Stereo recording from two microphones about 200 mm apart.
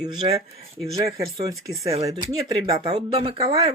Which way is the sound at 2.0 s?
20° right (ahead or behind).